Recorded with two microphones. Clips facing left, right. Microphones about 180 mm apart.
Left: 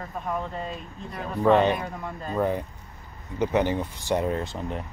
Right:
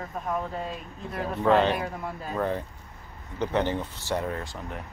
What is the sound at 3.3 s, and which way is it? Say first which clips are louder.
Speech: left 3 dB; 10° left (ahead or behind).